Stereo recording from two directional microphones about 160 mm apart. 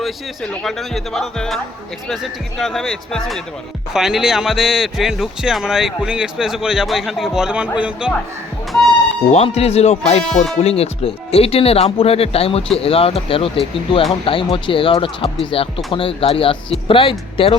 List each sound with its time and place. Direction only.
0.0 s speech: 5° left (ahead or behind)
9.3 s speech: 40° left (ahead or behind)